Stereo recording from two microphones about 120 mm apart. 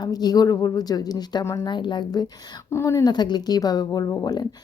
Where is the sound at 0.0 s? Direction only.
35° left (ahead or behind).